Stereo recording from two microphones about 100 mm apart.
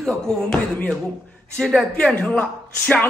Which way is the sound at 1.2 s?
15° left (ahead or behind).